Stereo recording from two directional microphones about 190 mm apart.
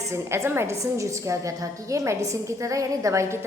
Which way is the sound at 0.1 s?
15° right (ahead or behind).